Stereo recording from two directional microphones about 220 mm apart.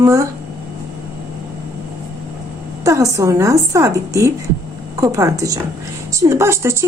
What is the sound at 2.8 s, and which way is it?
A woman's voice, 15° right (ahead or behind).